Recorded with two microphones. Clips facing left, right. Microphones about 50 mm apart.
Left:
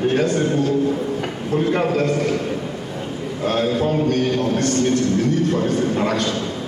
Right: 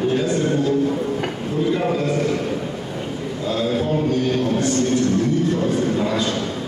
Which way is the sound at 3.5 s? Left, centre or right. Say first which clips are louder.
Left 2 dB; left.